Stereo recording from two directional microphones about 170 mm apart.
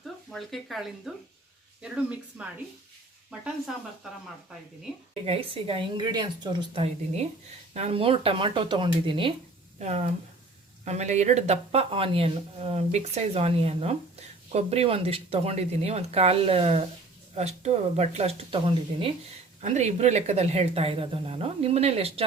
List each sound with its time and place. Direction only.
0.0 s speech: centre (ahead or behind)
5.2 s speech: 30° right (ahead or behind)
6.8 s speech: 40° right (ahead or behind)
9.7 s speech: 40° right (ahead or behind)
19.6 s speech: 40° right (ahead or behind)